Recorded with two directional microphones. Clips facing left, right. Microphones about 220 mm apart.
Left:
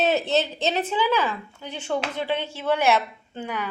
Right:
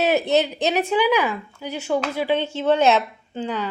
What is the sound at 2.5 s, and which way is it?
Speech, 25° right (ahead or behind).